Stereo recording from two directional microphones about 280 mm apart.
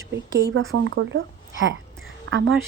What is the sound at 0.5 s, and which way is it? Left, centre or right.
Speech, right.